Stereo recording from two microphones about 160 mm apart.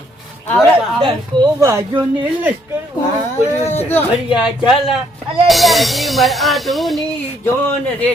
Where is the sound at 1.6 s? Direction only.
20° right (ahead or behind).